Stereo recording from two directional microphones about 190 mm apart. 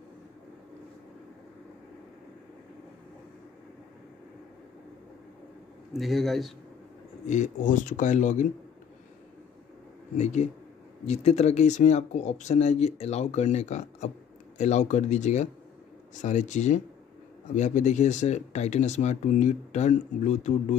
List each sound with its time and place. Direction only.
5.9 s speech: centre (ahead or behind)
7.2 s speech: 40° left (ahead or behind)
10.1 s speech: 35° left (ahead or behind)